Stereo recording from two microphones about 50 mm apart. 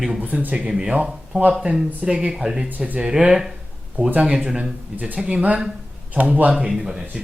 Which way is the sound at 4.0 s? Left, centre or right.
Right.